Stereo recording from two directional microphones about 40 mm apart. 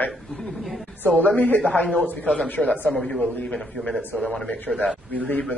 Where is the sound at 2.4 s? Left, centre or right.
Left.